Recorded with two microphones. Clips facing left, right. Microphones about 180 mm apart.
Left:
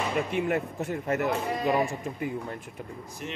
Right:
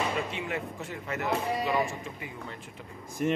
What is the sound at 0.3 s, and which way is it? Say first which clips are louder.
A man's voice: left 7 dB; 50° left (ahead or behind).